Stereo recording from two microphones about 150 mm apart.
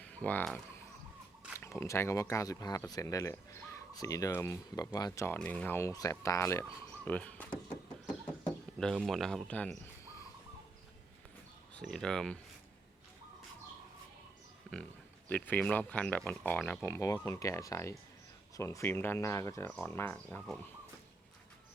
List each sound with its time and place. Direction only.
0.0 s speech: 10° left (ahead or behind)
8.8 s speech: centre (ahead or behind)
11.7 s speech: 5° left (ahead or behind)
15.3 s speech: 10° left (ahead or behind)